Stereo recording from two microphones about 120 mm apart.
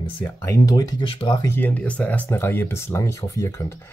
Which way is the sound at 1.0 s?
45° left (ahead or behind).